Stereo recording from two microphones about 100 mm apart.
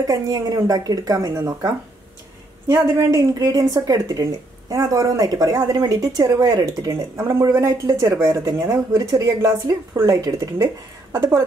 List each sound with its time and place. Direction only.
0.0 s speech: 40° right (ahead or behind)
2.7 s speech: 40° right (ahead or behind)